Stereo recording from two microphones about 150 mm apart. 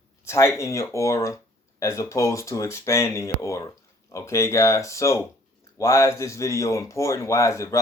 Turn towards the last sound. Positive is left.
turn(degrees=20)  # may be behind; listen again after turning